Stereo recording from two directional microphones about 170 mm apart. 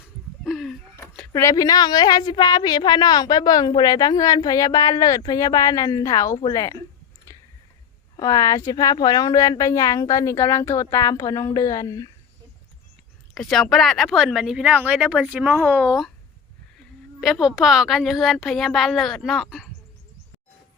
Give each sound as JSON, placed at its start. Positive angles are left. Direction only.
{"t": 0.4, "sound": "a sound", "side_deg": 0}
{"t": 1.3, "sound": "a woman's voice", "side_deg": 20}
{"t": 8.1, "sound": "a woman's voice", "side_deg": 20}
{"t": 13.3, "sound": "speech", "side_deg": 0}
{"t": 17.2, "sound": "speech", "side_deg": 0}